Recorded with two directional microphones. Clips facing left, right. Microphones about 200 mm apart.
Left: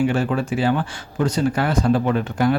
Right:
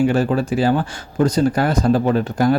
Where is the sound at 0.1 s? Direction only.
35° right (ahead or behind).